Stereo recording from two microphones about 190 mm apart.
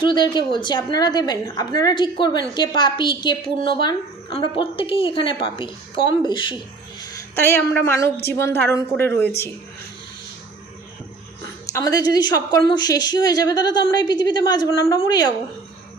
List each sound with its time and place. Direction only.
0.0 s a woman's voice: 25° left (ahead or behind)
7.0 s a woman's voice: 15° left (ahead or behind)
11.6 s a woman's voice: 20° left (ahead or behind)